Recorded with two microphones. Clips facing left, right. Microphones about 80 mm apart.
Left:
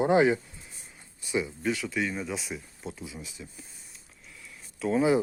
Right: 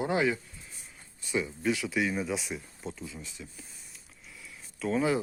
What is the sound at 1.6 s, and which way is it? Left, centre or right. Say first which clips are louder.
Speech: even; centre.